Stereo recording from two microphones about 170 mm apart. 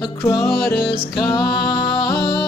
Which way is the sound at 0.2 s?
15° left (ahead or behind).